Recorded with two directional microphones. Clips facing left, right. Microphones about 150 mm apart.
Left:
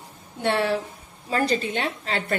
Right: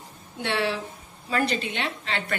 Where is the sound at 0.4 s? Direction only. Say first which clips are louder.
Left 4 dB; 45° left (ahead or behind).